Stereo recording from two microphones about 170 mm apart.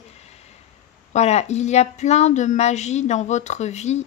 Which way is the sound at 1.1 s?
40° left (ahead or behind).